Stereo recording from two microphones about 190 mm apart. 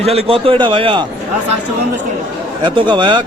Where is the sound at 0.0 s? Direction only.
30° right (ahead or behind).